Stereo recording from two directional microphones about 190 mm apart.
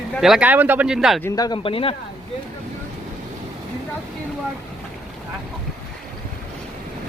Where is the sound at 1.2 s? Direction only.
20° left (ahead or behind).